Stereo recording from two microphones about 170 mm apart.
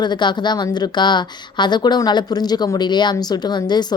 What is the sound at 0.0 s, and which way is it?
A woman's voice, 25° left (ahead or behind).